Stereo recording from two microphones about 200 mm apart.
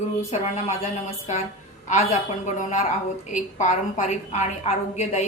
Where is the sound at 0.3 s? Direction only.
35° left (ahead or behind).